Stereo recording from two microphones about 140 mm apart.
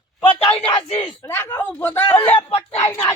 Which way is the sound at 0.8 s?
40° left (ahead or behind).